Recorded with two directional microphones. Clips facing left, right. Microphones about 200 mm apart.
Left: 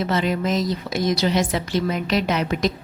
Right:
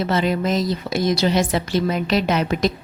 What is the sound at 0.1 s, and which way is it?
A woman's voice, 35° right (ahead or behind).